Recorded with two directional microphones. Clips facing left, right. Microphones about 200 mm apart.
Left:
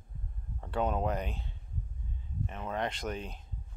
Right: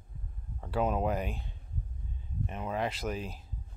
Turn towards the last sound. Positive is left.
turn(degrees=-5)  # may be behind; listen again after turning